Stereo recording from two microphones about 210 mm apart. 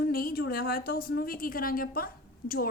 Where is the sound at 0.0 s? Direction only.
45° left (ahead or behind).